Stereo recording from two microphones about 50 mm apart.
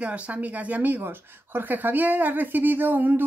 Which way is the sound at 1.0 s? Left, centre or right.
Right.